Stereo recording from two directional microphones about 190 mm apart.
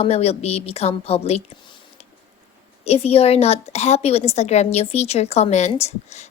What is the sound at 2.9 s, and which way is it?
A woman's voice, 30° left (ahead or behind).